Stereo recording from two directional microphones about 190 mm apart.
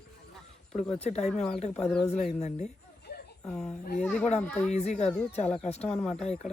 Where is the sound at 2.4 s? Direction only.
40° left (ahead or behind).